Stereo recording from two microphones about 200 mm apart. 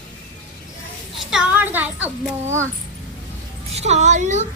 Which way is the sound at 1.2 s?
5° right (ahead or behind).